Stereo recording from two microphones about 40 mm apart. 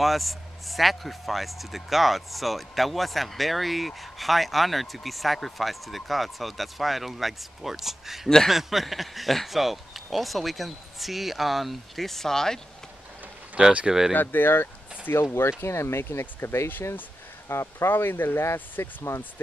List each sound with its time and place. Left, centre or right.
0.0 s speech: centre
13.8 s speech: centre
14.1 s speech: left
15.3 s speech: left
17.8 s speech: left
19.1 s speech: left